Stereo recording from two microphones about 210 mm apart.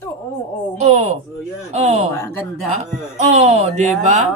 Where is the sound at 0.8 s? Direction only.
30° right (ahead or behind).